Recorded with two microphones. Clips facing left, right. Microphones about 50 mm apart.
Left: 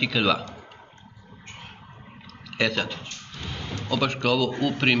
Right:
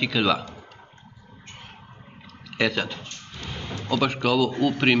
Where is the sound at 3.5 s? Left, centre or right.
Centre.